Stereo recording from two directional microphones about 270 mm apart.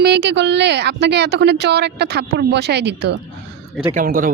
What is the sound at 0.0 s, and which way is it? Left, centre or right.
Speech, right.